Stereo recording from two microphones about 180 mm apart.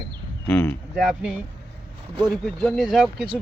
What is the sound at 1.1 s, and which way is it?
Speech, 5° right (ahead or behind).